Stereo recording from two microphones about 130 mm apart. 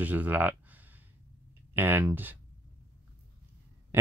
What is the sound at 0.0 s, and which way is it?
Speech, 10° right (ahead or behind).